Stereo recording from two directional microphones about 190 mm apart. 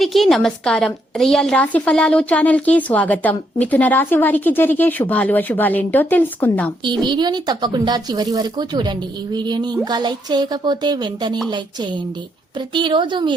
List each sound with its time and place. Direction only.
0.0 s a woman's voice: centre (ahead or behind)
7.0 s speech: 25° right (ahead or behind)
12.5 s speech: 25° right (ahead or behind)